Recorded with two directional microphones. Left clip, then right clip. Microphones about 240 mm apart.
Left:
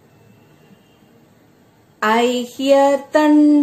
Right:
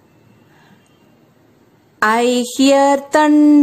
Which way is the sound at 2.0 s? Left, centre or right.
Right.